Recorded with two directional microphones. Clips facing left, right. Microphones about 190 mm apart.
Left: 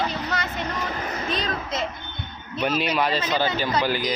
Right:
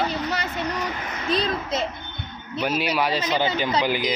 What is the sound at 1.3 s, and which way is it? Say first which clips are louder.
Speech: right 7 dB; 35° right (ahead or behind).